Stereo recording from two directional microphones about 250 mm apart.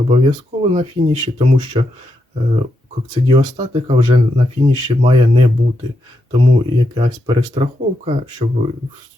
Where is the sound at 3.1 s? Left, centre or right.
Centre.